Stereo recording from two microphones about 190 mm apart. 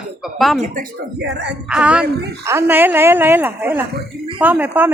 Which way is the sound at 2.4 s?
10° right (ahead or behind).